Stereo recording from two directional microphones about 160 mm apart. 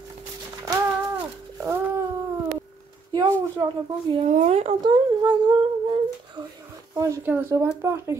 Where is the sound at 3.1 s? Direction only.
25° right (ahead or behind).